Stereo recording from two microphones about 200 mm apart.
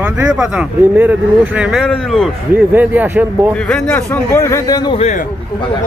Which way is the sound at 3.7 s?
10° left (ahead or behind).